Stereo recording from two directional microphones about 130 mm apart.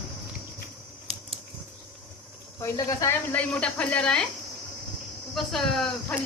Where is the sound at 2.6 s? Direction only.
25° left (ahead or behind).